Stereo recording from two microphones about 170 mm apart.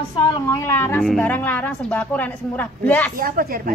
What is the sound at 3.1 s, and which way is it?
Speech, 55° right (ahead or behind).